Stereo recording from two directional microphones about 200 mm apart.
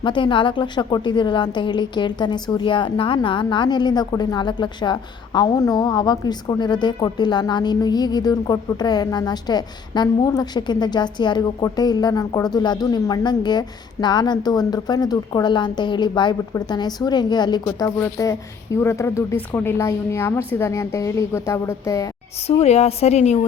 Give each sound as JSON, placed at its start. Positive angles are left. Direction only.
{"t": 0.0, "sound": "a woman's voice", "side_deg": 25}
{"t": 22.4, "sound": "a woman's voice", "side_deg": 30}